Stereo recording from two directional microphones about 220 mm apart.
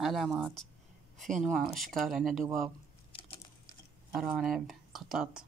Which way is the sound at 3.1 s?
25° left (ahead or behind).